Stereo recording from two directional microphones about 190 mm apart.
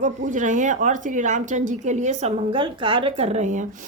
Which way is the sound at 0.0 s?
40° right (ahead or behind).